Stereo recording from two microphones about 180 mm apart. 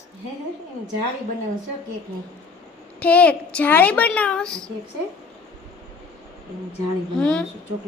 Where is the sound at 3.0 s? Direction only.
10° left (ahead or behind).